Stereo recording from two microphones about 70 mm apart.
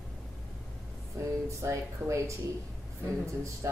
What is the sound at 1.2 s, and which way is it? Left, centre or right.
A woman's voice, right.